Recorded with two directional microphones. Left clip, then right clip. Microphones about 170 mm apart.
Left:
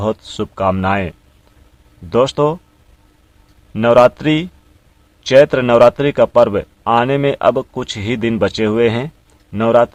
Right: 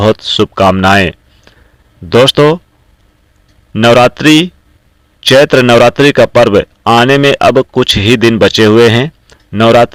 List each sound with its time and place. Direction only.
0.0 s speech: 25° right (ahead or behind)
3.8 s speech: 30° right (ahead or behind)